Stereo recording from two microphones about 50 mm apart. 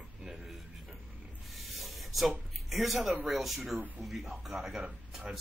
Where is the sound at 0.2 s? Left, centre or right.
Centre.